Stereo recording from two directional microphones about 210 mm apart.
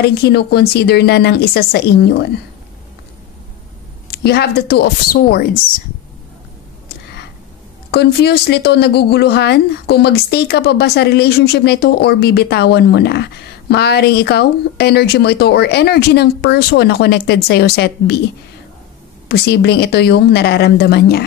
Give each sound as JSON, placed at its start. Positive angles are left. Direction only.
{"t": 0.0, "sound": "speech", "side_deg": 50}
{"t": 4.1, "sound": "speech", "side_deg": 50}
{"t": 7.9, "sound": "speech", "side_deg": 50}
{"t": 19.2, "sound": "speech", "side_deg": 50}